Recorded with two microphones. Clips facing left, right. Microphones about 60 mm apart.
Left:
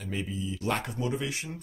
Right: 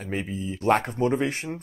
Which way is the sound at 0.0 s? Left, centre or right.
Right.